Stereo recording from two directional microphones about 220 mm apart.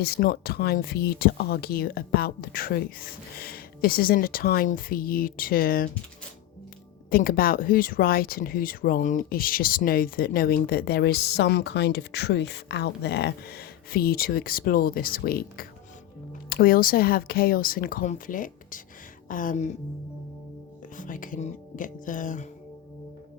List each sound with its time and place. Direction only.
0.0 s speech: 45° left (ahead or behind)
7.1 s speech: 40° left (ahead or behind)
20.9 s speech: 35° left (ahead or behind)